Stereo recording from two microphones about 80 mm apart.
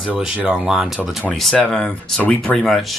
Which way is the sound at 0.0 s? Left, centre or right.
Centre.